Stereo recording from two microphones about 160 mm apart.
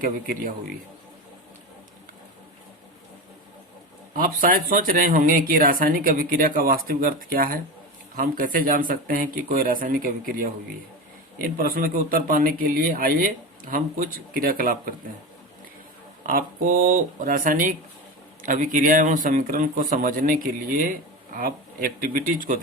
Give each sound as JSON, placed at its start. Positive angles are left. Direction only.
{"t": 0.0, "sound": "speech", "side_deg": -65}
{"t": 4.1, "sound": "speech", "side_deg": -60}
{"t": 16.2, "sound": "speech", "side_deg": -60}